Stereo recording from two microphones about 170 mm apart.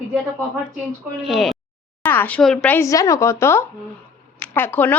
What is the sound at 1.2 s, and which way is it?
Speech, centre (ahead or behind).